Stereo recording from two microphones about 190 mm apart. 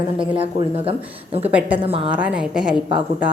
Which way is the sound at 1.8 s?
30° right (ahead or behind).